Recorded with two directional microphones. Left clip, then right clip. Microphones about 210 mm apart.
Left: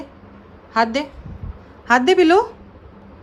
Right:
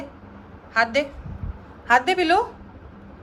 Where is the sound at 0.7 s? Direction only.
30° left (ahead or behind).